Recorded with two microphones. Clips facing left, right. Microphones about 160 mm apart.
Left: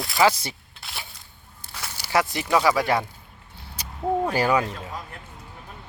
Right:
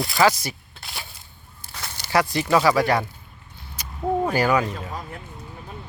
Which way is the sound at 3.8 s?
30° left (ahead or behind).